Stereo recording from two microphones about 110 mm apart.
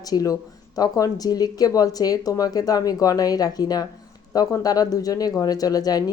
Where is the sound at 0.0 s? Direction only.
35° left (ahead or behind).